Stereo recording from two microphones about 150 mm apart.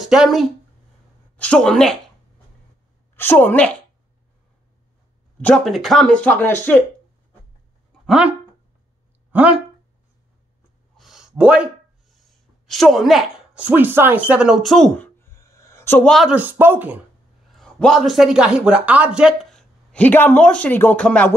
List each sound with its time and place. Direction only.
0.0 s speech: 5° right (ahead or behind)
1.3 s speech: 10° left (ahead or behind)
3.2 s speech: 15° left (ahead or behind)
5.4 s speech: centre (ahead or behind)
8.1 s speech: 5° right (ahead or behind)
11.0 s a sound: 5° right (ahead or behind)
12.6 s speech: centre (ahead or behind)
15.1 s a sound: 15° left (ahead or behind)
16.1 s speech: 5° right (ahead or behind)
17.5 s a man's voice: 5° left (ahead or behind)
19.9 s speech: 10° left (ahead or behind)